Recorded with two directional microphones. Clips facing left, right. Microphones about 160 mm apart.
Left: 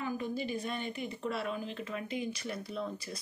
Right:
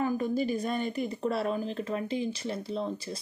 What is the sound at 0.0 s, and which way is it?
Speech, 45° right (ahead or behind).